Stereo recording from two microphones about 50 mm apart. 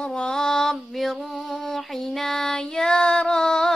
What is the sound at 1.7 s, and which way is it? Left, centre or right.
Female singing, centre.